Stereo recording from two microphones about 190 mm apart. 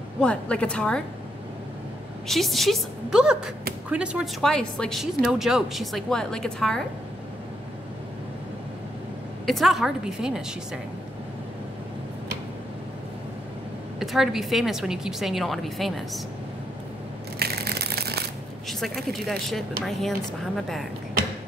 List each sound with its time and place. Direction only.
0.2 s a woman's voice: 5° left (ahead or behind)
2.2 s a woman's voice: centre (ahead or behind)
9.5 s a woman's voice: centre (ahead or behind)
13.9 s a woman's voice: centre (ahead or behind)
17.4 s a sound: 55° right (ahead or behind)
18.7 s a woman's voice: centre (ahead or behind)